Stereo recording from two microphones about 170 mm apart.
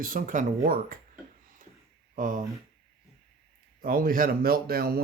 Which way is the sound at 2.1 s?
50° right (ahead or behind).